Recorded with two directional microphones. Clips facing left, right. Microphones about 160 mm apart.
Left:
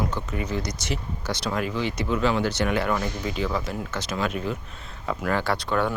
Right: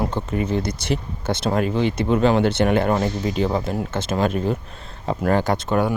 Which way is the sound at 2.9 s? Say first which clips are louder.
Right 6 dB; 30° right (ahead or behind).